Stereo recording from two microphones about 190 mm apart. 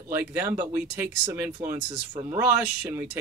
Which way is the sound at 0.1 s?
10° right (ahead or behind).